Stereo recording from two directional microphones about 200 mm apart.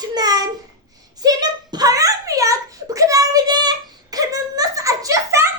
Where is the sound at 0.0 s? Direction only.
20° right (ahead or behind).